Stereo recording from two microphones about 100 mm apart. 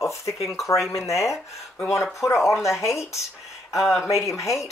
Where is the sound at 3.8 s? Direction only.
5° right (ahead or behind).